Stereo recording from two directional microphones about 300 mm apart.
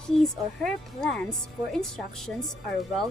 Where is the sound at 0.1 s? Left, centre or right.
Centre.